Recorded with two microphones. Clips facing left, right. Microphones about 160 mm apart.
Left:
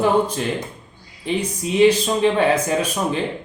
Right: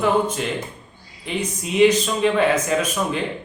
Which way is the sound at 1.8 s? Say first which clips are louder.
Left 1 dB; 30° left (ahead or behind).